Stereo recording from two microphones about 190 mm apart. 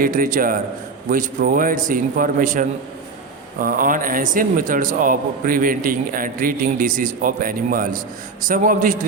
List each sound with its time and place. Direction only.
0.0 s a man's voice: 45° right (ahead or behind)